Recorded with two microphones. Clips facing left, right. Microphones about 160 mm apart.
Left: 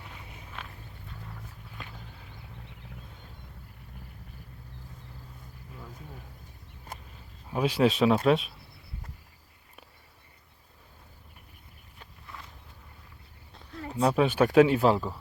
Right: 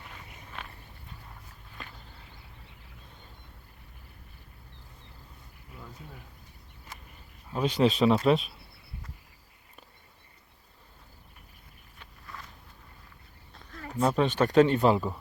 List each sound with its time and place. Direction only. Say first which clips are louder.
0.3 s walk: right 1 dB; centre (ahead or behind)
7.5 s speech: left 1 dB; 5° left (ahead or behind)
12.2 s a sound: right 1 dB; 20° left (ahead or behind)
13.7 s speech: left 1 dB; 15° left (ahead or behind)